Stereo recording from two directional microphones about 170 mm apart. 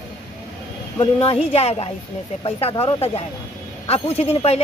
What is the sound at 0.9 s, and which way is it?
Speech, 35° left (ahead or behind).